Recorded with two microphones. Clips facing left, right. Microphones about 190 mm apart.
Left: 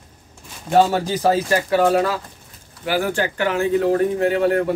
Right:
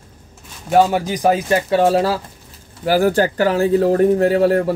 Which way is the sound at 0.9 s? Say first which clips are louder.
Right 2 dB; 15° right (ahead or behind).